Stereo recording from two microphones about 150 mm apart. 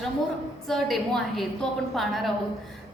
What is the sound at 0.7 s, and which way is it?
A woman's voice, centre (ahead or behind).